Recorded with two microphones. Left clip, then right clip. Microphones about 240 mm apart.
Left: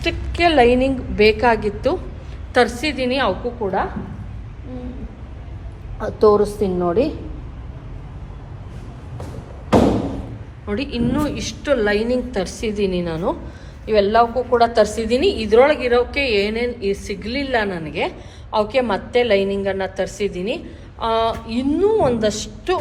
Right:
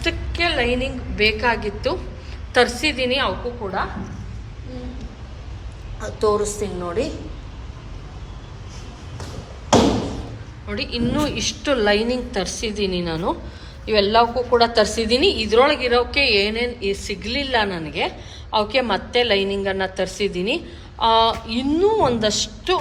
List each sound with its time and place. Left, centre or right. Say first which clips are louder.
0.0 s a woman's voice: left 4 dB; centre
6.0 s a woman's voice: left 6 dB; left
10.7 s a woman's voice: left 2 dB; centre